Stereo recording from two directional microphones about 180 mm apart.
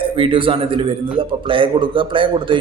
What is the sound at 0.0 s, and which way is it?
A man's voice, 30° right (ahead or behind).